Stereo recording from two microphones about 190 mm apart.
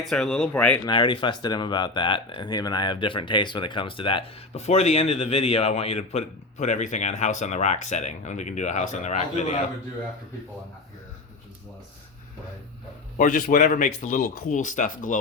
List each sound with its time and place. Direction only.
0.1 s speech: 5° left (ahead or behind)
0.9 s speech: 25° left (ahead or behind)
13.1 s speech: 45° left (ahead or behind)